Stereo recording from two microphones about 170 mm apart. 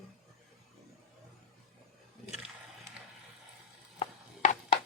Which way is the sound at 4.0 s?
45° left (ahead or behind).